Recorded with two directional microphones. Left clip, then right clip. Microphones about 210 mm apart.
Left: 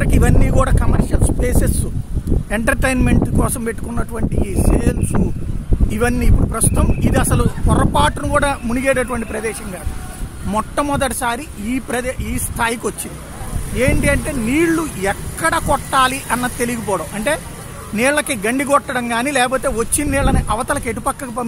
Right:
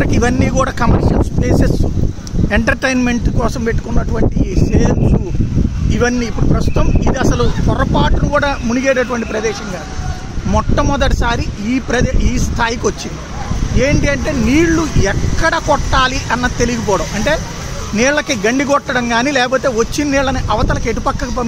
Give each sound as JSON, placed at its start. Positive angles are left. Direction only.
{"t": 0.0, "sound": "speech", "side_deg": 15}
{"t": 5.9, "sound": "speech", "side_deg": 30}